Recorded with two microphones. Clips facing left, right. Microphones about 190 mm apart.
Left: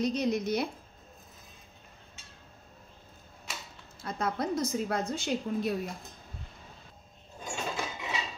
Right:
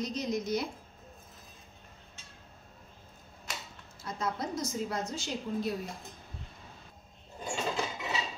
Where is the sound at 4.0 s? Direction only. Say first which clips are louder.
Left 3 dB; 60° left (ahead or behind).